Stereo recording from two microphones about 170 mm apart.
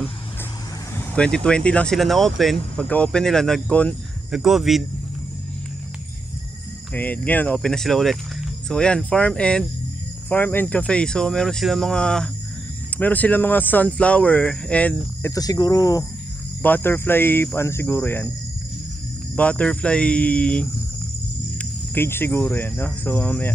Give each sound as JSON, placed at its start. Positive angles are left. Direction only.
{"t": 1.1, "sound": "speech", "side_deg": 5}
{"t": 6.9, "sound": "speech", "side_deg": 10}
{"t": 15.2, "sound": "speech", "side_deg": 20}
{"t": 19.3, "sound": "speech", "side_deg": 5}